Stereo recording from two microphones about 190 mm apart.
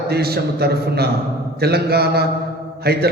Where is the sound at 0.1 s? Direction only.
55° right (ahead or behind).